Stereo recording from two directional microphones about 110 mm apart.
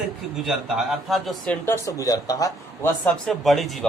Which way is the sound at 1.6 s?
25° left (ahead or behind).